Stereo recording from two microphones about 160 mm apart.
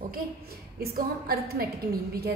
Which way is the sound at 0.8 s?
75° right (ahead or behind).